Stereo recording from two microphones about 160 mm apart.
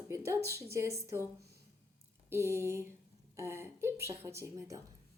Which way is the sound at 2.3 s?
15° right (ahead or behind).